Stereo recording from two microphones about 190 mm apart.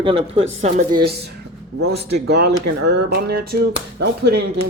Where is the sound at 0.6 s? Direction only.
40° right (ahead or behind); by 4.4 s 60° right (ahead or behind).